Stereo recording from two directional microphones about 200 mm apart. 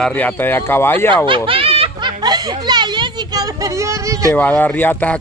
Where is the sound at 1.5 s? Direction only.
30° right (ahead or behind).